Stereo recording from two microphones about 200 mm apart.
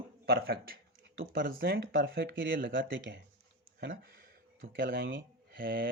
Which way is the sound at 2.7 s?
65° right (ahead or behind).